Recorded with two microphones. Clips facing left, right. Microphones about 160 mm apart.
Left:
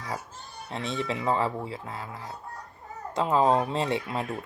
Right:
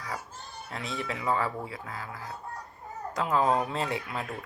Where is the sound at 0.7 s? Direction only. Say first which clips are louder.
Left 4 dB; 25° left (ahead or behind).